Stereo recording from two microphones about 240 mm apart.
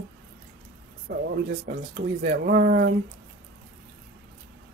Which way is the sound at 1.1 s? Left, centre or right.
Right.